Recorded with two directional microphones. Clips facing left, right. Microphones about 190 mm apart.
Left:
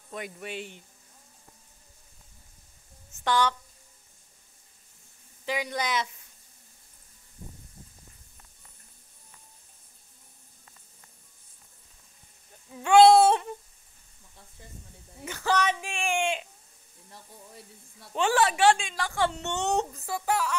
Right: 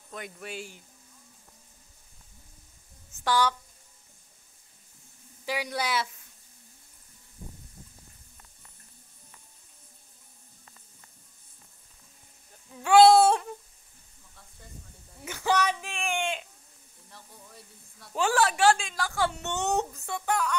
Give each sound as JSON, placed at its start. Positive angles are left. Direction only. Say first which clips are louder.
{"t": 0.1, "sound": "a woman's voice", "louder": "left 2 dB", "side_deg": 0}
{"t": 3.3, "sound": "speech", "louder": "even", "side_deg": -10}
{"t": 5.4, "sound": "speech", "louder": "left 1 dB", "side_deg": -10}
{"t": 12.8, "sound": "a woman's voice", "louder": "left 1 dB", "side_deg": -5}
{"t": 15.2, "sound": "speech", "louder": "even", "side_deg": -10}
{"t": 15.6, "sound": "speech", "louder": "left 1 dB", "side_deg": 5}
{"t": 18.1, "sound": "a woman's voice", "louder": "left 1 dB", "side_deg": 0}